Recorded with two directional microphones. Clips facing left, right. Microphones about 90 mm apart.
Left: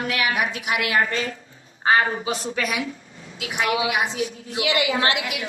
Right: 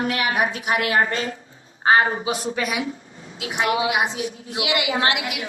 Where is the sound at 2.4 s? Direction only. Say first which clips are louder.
Right 1 dB; 10° right (ahead or behind).